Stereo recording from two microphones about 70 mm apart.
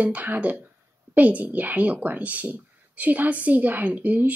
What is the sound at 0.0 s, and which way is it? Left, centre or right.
Speech, right.